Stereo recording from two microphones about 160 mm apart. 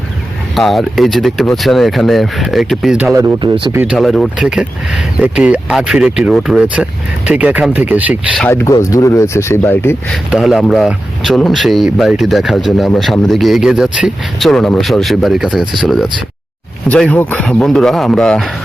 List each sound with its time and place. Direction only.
0.5 s speech: centre (ahead or behind)
3.1 s speech: 20° right (ahead or behind)
3.9 s speech: centre (ahead or behind)
8.4 s speech: 15° left (ahead or behind)
10.1 s speech: centre (ahead or behind)
16.9 s speech: 10° left (ahead or behind)